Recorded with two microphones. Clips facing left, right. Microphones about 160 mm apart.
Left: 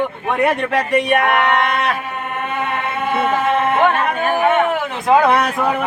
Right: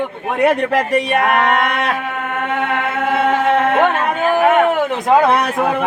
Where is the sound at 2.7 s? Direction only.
90° right.